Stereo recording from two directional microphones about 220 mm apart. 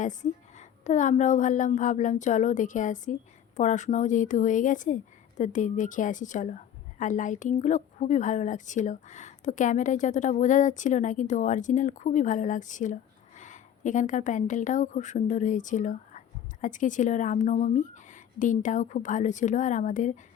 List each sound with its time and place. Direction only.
0.0 s a woman's voice: 35° left (ahead or behind)